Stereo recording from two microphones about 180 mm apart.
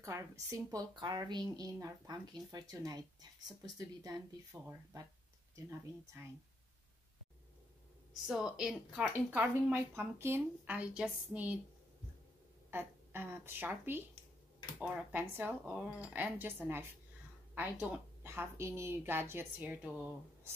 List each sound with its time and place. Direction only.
0.0 s speech: 15° right (ahead or behind)
8.1 s speech: 5° right (ahead or behind)
12.7 s speech: 10° right (ahead or behind)